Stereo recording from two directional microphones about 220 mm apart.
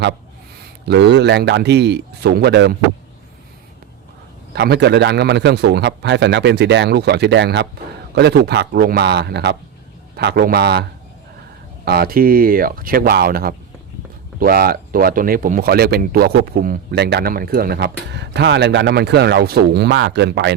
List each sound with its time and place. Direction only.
0.9 s speech: 50° right (ahead or behind)
4.5 s speech: 50° right (ahead or behind)
11.9 s speech: 45° right (ahead or behind)